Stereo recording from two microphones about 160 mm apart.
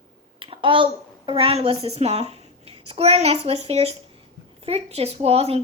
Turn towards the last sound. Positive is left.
turn(degrees=-40)  # may be behind; listen again after turning